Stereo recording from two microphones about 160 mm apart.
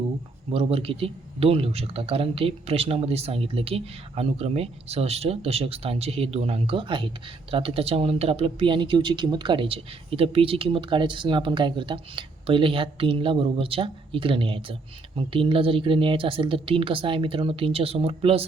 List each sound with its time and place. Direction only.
0.5 s speech: 40° right (ahead or behind)